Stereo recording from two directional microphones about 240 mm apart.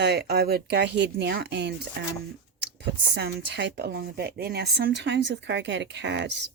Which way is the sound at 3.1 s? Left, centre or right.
Right.